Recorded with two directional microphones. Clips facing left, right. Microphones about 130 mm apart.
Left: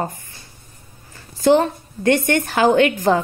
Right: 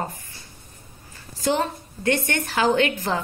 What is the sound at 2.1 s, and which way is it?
Speech, 25° left (ahead or behind).